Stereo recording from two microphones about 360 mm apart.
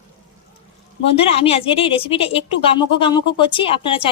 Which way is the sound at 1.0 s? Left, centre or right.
Centre.